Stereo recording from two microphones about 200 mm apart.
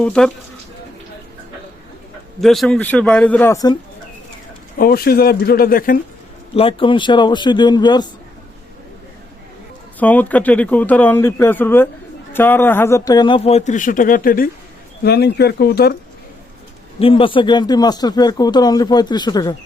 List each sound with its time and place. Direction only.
0.0 s a man's voice: 5° left (ahead or behind)
2.4 s a man's voice: centre (ahead or behind); by 3.8 s 15° left (ahead or behind)
4.8 s speech: 50° left (ahead or behind)
6.5 s speech: 30° left (ahead or behind)
10.0 s speech: 10° left (ahead or behind); by 16.0 s 55° left (ahead or behind)
17.0 s speech: 25° left (ahead or behind)